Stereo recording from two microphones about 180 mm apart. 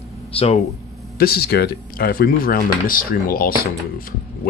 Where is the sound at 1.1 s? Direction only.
60° left (ahead or behind).